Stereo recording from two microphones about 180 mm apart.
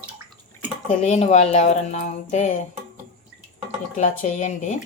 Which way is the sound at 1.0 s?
40° left (ahead or behind).